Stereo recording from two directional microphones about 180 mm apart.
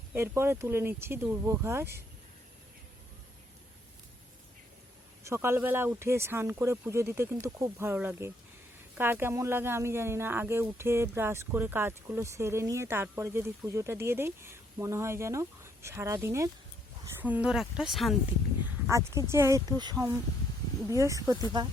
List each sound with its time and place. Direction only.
0.1 s speech: 15° right (ahead or behind)
5.2 s speech: 15° right (ahead or behind)
18.9 s speech: 15° right (ahead or behind)